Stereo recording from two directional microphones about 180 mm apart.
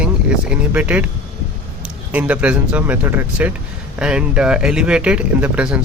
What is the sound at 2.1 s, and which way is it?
Speech, 5° right (ahead or behind).